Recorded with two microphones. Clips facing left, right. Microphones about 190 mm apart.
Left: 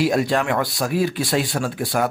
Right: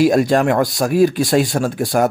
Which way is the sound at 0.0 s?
45° right (ahead or behind).